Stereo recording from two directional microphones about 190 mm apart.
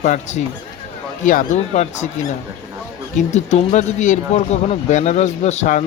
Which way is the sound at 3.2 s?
40° left (ahead or behind).